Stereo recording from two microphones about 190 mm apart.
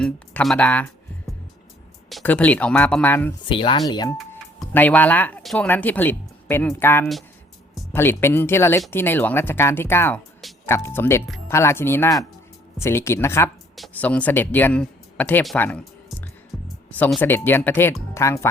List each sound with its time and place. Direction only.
0.0 s speech: 5° left (ahead or behind)
2.0 s speech: 5° left (ahead or behind)
3.4 s speech: 25° left (ahead or behind)
4.6 s speech: 10° left (ahead or behind)
13.7 s speech: 5° left (ahead or behind)
16.0 s music: 5° left (ahead or behind)
18.1 s speech: 15° left (ahead or behind)